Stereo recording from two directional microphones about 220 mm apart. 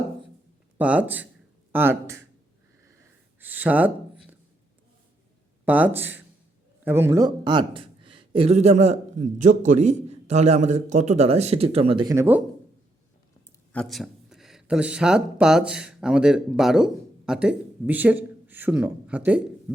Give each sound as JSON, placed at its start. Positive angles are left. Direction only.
{"t": 0.8, "sound": "speech", "side_deg": -5}
{"t": 3.4, "sound": "speech", "side_deg": -5}
{"t": 5.6, "sound": "speech", "side_deg": -5}
{"t": 13.7, "sound": "speech", "side_deg": 0}